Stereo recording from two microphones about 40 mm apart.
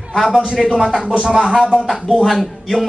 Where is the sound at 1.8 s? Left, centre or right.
Centre.